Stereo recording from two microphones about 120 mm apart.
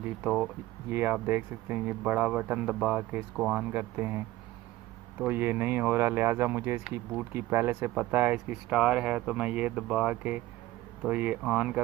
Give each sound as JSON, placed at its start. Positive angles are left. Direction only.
{"t": 0.2, "sound": "speech", "side_deg": -5}
{"t": 0.8, "sound": "speech", "side_deg": -20}
{"t": 5.2, "sound": "speech", "side_deg": -15}